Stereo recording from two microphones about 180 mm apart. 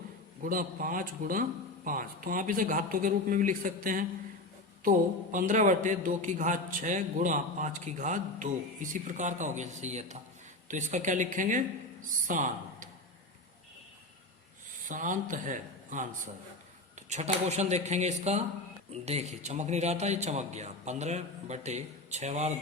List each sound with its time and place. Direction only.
0.4 s a man's voice: 50° right (ahead or behind)
14.8 s a man's voice: 45° right (ahead or behind)